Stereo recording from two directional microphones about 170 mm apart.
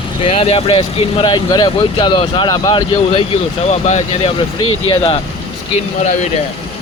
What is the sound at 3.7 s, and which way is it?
Speech, 40° left (ahead or behind).